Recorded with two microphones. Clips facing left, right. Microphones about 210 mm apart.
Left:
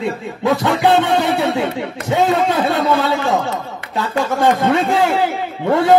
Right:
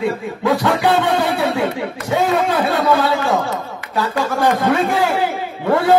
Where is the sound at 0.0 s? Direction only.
25° left (ahead or behind).